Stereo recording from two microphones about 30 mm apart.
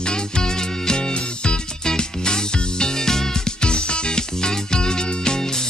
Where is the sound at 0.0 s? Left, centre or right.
Left.